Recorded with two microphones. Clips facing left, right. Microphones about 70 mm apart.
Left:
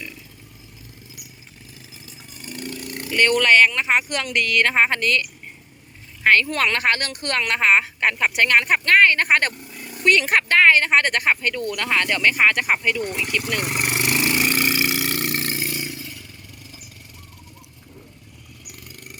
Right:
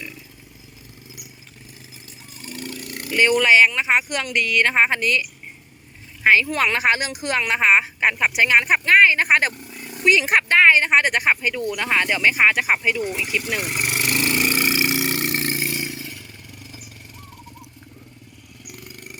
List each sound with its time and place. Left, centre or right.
3.1 s speech: centre
13.7 s vehicle: left
14.4 s vehicle: centre; by 16.1 s right